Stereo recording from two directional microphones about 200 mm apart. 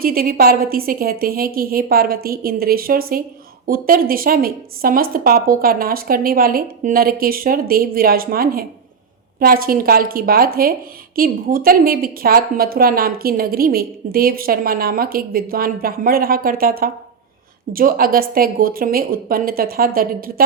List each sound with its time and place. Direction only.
0.0 s a woman's voice: 45° right (ahead or behind)